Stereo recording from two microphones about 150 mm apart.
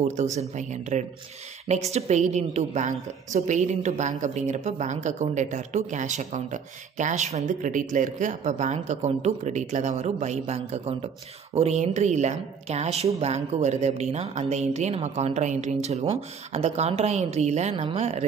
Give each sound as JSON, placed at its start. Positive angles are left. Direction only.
{"t": 0.1, "sound": "speech", "side_deg": -50}